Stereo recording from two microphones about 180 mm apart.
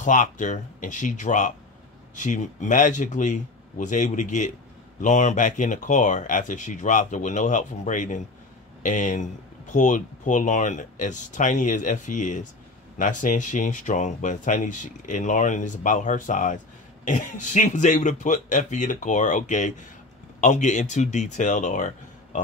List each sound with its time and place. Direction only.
0.0 s speech: 45° left (ahead or behind)